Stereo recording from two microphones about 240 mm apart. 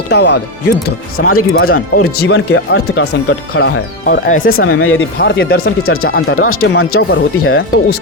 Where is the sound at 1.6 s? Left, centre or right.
Left.